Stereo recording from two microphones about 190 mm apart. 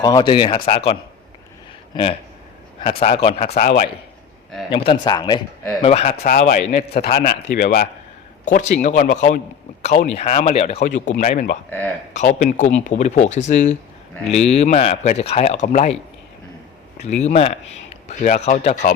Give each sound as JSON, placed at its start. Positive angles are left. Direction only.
{"t": 0.0, "sound": "speech", "side_deg": 20}
{"t": 3.0, "sound": "speech", "side_deg": 30}
{"t": 4.7, "sound": "speech", "side_deg": 25}
{"t": 5.8, "sound": "speech", "side_deg": 35}
{"t": 6.8, "sound": "a man's voice", "side_deg": 55}
{"t": 7.2, "sound": "speech", "side_deg": 45}
{"t": 10.8, "sound": "speech", "side_deg": 40}
{"t": 17.2, "sound": "speech", "side_deg": 30}